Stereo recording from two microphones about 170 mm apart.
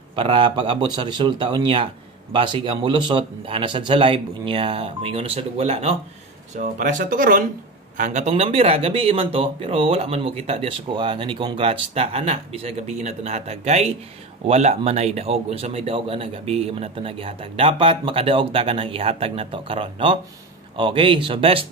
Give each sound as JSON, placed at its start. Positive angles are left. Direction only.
{"t": 0.1, "sound": "speech", "side_deg": -30}